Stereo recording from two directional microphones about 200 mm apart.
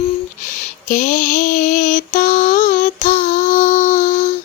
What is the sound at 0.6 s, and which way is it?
Female singing, 40° left (ahead or behind).